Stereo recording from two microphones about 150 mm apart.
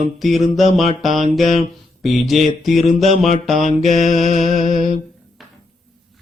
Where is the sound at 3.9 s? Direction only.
55° left (ahead or behind).